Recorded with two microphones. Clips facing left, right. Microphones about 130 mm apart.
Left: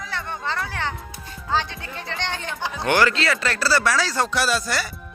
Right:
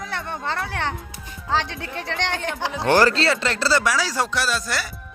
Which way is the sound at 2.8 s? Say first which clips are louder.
Right 3 dB; 35° right (ahead or behind).